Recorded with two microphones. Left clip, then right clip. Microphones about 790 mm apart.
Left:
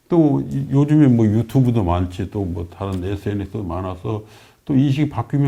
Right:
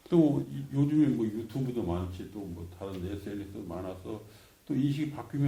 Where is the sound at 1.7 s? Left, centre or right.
Left.